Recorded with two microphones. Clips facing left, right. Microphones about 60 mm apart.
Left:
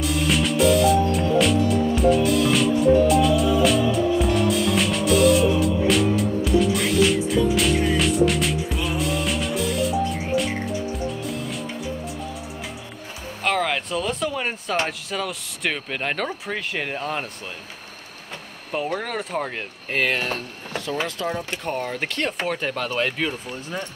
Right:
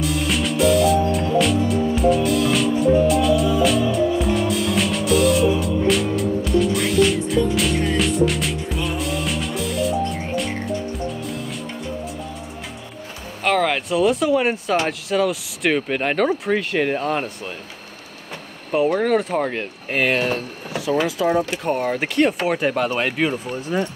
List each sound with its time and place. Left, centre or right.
0.0 s music: centre
13.4 s speech: centre
18.7 s speech: centre